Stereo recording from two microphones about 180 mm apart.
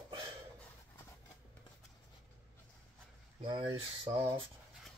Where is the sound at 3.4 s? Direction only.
25° right (ahead or behind).